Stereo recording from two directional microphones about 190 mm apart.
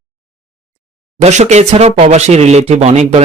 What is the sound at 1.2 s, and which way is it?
Speech, 40° right (ahead or behind).